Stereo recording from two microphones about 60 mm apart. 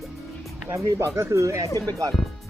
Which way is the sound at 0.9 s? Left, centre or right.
Right.